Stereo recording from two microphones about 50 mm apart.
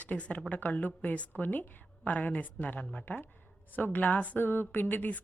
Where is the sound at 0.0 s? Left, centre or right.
Left.